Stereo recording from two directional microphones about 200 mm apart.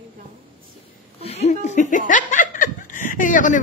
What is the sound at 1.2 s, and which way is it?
A woman's voice, 35° left (ahead or behind).